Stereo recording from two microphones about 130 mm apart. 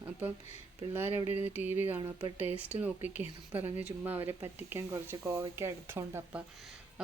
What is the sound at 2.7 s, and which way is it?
Speech, 15° right (ahead or behind).